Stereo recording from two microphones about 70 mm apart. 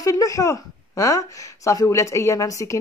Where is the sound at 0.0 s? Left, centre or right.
Left.